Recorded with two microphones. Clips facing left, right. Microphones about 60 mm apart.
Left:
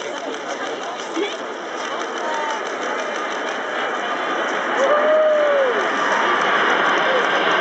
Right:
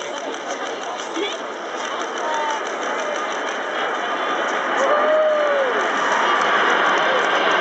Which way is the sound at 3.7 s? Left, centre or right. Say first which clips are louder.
Right 1 dB; centre.